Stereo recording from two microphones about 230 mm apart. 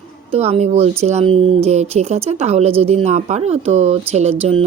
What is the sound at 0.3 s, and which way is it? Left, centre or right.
Speech, right.